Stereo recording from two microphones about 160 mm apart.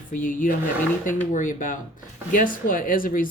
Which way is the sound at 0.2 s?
55° left (ahead or behind).